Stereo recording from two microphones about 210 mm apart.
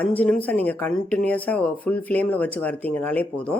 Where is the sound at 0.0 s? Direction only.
5° left (ahead or behind).